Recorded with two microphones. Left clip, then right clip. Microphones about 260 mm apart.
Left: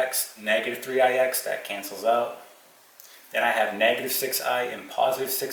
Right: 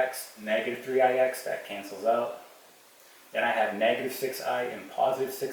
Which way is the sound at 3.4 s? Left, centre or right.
Centre.